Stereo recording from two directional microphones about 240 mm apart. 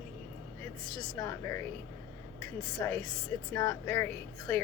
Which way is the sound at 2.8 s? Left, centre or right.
Centre.